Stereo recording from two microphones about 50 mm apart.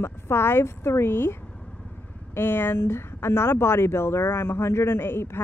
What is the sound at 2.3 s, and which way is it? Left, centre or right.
Speech, left.